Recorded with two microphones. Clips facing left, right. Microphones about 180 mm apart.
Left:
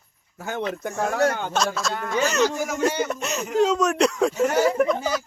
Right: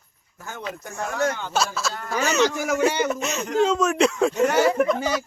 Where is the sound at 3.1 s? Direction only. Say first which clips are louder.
Right 2 dB; centre (ahead or behind).